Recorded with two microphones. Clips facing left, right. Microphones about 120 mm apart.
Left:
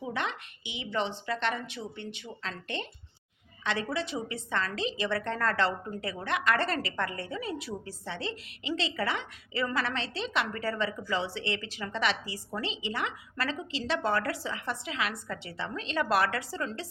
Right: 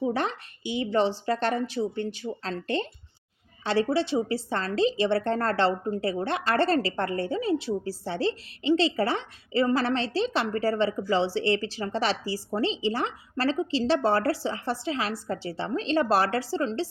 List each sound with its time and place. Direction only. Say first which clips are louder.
0.0 s a woman's voice: right 7 dB; 35° right (ahead or behind)